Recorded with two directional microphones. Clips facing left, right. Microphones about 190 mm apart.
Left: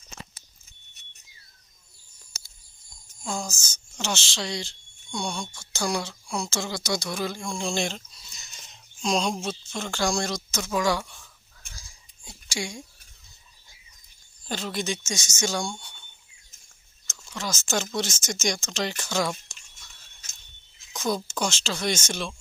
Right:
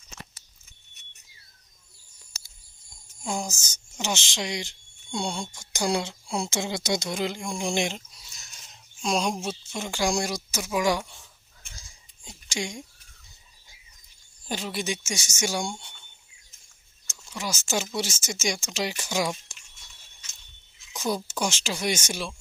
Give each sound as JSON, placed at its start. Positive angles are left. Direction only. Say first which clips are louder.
{"t": 3.3, "sound": "speech", "louder": "right 1 dB", "side_deg": -20}
{"t": 5.0, "sound": "speech", "louder": "right 1 dB", "side_deg": -25}
{"t": 8.4, "sound": "speech", "louder": "left 2 dB", "side_deg": -5}
{"t": 11.7, "sound": "a sound", "louder": "even", "side_deg": -20}
{"t": 14.4, "sound": "speech", "louder": "left 1 dB", "side_deg": -10}
{"t": 15.7, "sound": "a sound", "louder": "right 1 dB", "side_deg": -25}
{"t": 17.1, "sound": "speech", "louder": "even", "side_deg": -10}
{"t": 20.9, "sound": "speech", "louder": "left 1 dB", "side_deg": -10}